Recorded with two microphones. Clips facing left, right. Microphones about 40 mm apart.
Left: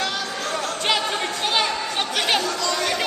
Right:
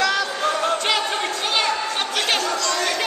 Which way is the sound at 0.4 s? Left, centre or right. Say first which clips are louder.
Right 5 dB; right.